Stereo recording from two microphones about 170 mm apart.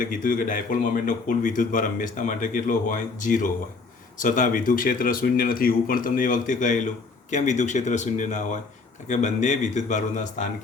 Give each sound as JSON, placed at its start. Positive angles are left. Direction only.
{"t": 0.0, "sound": "speech", "side_deg": 50}